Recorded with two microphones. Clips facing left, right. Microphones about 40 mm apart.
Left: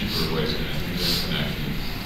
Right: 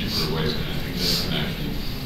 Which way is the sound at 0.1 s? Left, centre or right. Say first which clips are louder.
Right 1 dB; left.